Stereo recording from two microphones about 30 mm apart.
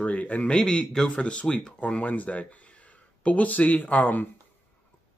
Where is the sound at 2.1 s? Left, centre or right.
Left.